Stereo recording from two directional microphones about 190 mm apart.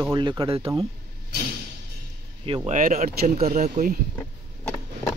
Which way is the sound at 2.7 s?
40° right (ahead or behind).